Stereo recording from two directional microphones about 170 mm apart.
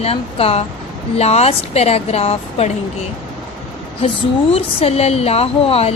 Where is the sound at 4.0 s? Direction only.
35° left (ahead or behind).